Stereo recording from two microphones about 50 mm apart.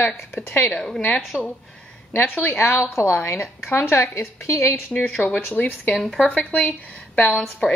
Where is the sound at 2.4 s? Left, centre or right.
Left.